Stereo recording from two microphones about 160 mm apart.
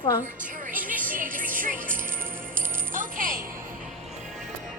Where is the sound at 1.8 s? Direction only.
15° right (ahead or behind).